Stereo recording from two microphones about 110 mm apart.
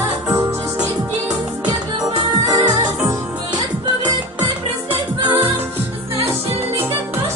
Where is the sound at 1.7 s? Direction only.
45° right (ahead or behind).